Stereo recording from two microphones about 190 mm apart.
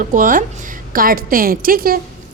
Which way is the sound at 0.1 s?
45° right (ahead or behind).